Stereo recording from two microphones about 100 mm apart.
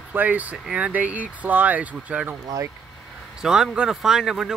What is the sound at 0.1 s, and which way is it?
Speech, 15° right (ahead or behind).